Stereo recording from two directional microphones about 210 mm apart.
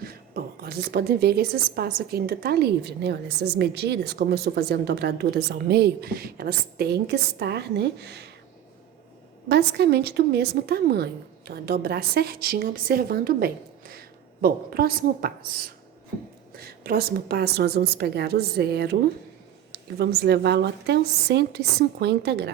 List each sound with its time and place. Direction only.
0.0 s a woman's voice: 45° right (ahead or behind)
9.5 s a woman's voice: 50° right (ahead or behind)